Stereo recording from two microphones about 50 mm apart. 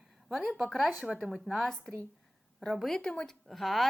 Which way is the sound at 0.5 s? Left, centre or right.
Centre.